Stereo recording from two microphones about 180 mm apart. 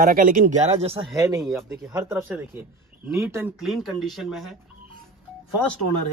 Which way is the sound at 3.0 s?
15° right (ahead or behind).